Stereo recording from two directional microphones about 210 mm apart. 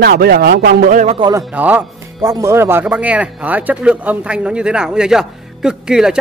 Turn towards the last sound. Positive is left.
turn(degrees=-5)  # may be behind; listen again after turning